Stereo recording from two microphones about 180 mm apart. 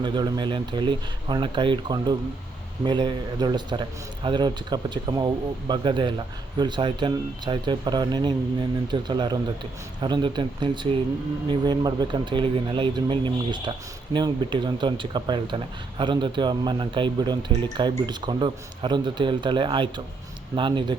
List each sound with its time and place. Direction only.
0.0 s speech: 25° right (ahead or behind)